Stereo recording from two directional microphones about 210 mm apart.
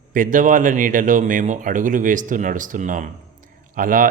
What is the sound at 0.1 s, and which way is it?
A man's voice, 40° right (ahead or behind).